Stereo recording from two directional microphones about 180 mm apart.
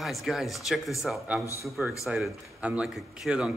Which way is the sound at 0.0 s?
Centre (ahead or behind).